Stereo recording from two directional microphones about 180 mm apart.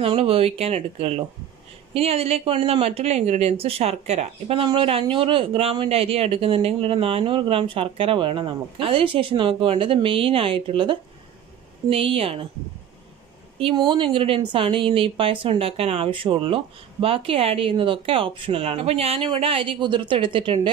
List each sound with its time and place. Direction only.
0.0 s speech: 35° right (ahead or behind)
13.6 s a woman's voice: 30° right (ahead or behind)